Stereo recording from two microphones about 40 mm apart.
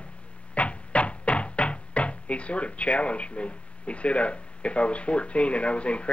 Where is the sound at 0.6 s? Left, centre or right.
Left.